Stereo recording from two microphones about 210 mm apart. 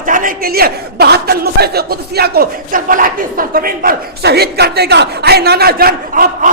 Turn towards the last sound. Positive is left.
turn(degrees=-40)  # may be behind; listen again after turning